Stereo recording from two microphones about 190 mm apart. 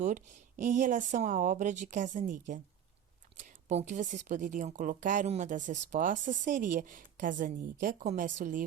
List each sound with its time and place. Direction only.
0.6 s a woman's voice: 40° right (ahead or behind)
3.7 s speech: 40° right (ahead or behind)